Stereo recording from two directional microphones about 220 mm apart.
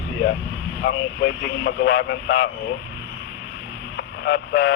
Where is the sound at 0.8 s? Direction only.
55° left (ahead or behind).